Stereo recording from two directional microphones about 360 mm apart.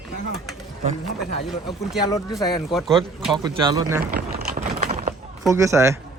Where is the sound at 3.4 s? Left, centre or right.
Centre.